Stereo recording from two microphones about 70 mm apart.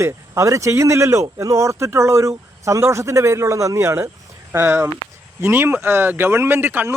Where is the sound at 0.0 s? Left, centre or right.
Right.